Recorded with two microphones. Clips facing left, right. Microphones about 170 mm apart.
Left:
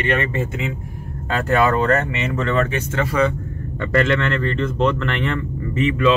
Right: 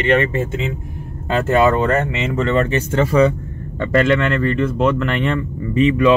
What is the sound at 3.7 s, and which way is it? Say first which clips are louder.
Speech: right 3 dB; 15° right (ahead or behind).